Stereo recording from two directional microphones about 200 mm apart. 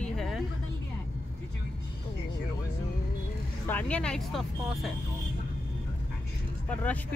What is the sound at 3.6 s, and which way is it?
Speech, 10° left (ahead or behind).